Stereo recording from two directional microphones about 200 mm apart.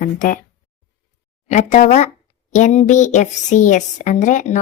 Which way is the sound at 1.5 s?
35° left (ahead or behind).